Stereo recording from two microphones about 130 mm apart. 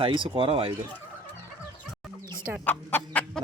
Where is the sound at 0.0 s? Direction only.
40° right (ahead or behind).